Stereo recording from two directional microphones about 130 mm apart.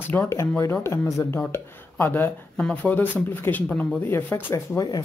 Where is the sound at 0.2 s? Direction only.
20° left (ahead or behind).